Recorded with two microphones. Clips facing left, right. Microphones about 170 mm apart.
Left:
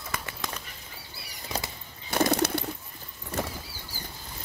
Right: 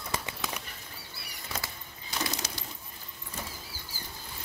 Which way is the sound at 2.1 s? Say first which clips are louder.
Left 12 dB; 60° left (ahead or behind).